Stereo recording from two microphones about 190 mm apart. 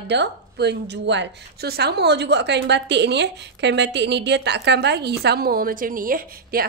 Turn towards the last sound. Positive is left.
turn(degrees=-50)  # may be behind; listen again after turning